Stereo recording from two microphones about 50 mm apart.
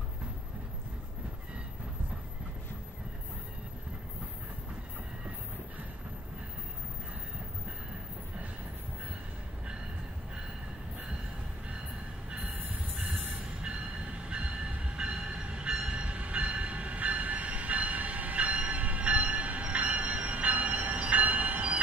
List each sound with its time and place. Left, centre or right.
13.1 s train: right